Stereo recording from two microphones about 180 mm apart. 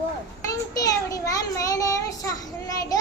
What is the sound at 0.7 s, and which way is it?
Child singing, 20° left (ahead or behind).